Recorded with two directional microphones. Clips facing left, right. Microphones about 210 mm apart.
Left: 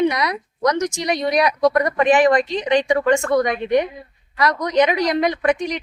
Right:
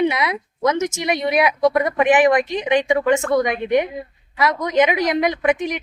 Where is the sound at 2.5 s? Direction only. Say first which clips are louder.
Even; 20° right (ahead or behind).